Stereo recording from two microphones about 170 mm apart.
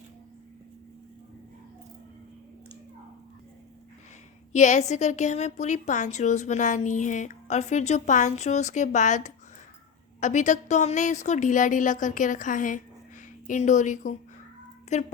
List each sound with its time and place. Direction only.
4.5 s a woman's voice: 45° left (ahead or behind)